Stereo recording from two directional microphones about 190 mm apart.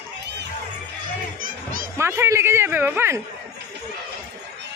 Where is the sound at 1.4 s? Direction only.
45° right (ahead or behind).